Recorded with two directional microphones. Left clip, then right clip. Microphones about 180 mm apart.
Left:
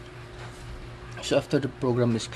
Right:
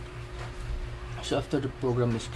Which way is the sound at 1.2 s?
50° left (ahead or behind).